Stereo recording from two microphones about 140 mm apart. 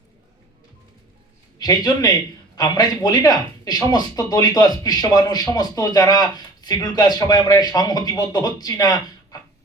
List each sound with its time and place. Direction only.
1.5 s a man's voice: 30° left (ahead or behind)